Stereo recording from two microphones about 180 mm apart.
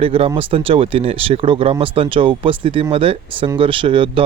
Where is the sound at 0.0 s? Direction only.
30° right (ahead or behind).